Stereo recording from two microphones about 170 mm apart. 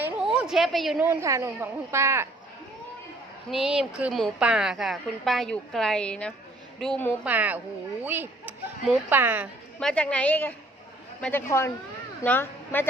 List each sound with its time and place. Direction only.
0.0 s a sound: 5° right (ahead or behind)
1.0 s a woman's voice: 15° right (ahead or behind)
3.5 s a woman's voice: 5° right (ahead or behind)
7.3 s a woman's voice: 10° right (ahead or behind)
9.8 s a woman's voice: 5° left (ahead or behind)